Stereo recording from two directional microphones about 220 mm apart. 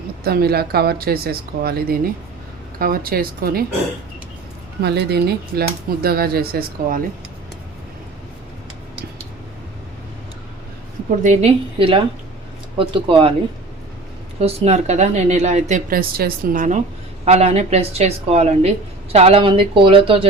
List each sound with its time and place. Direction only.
0.3 s speech: 45° right (ahead or behind)
4.8 s speech: 50° right (ahead or behind)
11.2 s a woman's voice: 30° right (ahead or behind)
14.4 s a woman's voice: 30° right (ahead or behind)